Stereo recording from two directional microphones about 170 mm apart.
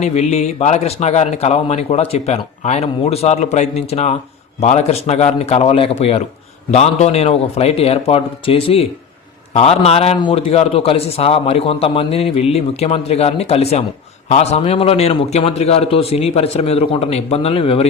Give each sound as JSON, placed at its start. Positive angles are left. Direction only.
{"t": 0.0, "sound": "speech", "side_deg": 40}